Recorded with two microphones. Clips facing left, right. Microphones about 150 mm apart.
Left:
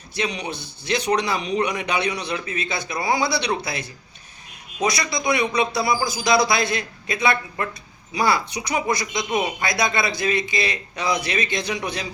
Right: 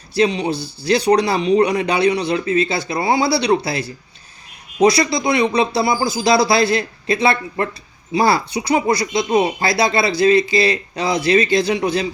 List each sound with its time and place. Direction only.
0.1 s a man's voice: 30° right (ahead or behind)